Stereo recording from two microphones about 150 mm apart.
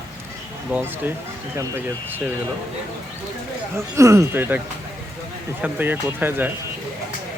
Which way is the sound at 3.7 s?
20° right (ahead or behind).